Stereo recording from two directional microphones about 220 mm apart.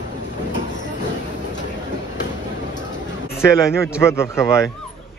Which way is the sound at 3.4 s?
10° left (ahead or behind).